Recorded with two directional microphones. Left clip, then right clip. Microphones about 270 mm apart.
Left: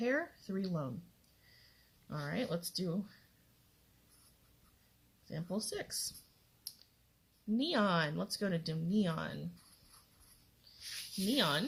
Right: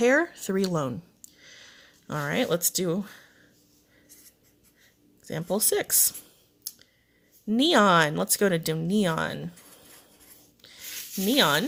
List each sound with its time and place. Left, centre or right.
0.0 s speech: right
2.0 s speech: right
5.3 s speech: right
7.5 s speech: right
11.3 s speech: right